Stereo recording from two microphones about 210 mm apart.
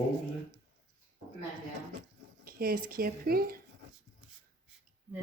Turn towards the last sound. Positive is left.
turn(degrees=-45)  # may be behind; listen again after turning